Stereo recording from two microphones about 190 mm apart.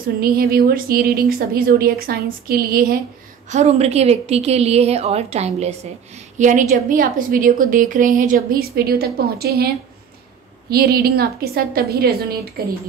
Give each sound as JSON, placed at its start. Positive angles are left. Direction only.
{"t": 0.2, "sound": "a woman's voice", "side_deg": -55}
{"t": 3.4, "sound": "a woman's voice", "side_deg": -35}
{"t": 10.7, "sound": "a woman's voice", "side_deg": -55}